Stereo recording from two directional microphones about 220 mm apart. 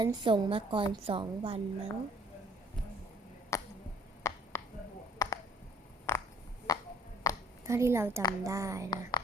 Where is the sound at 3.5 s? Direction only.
15° left (ahead or behind).